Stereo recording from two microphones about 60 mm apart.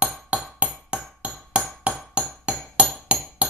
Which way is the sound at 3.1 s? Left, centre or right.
Centre.